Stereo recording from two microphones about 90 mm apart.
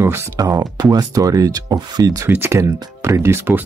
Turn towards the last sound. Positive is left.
turn(degrees=-25)  # may be behind; listen again after turning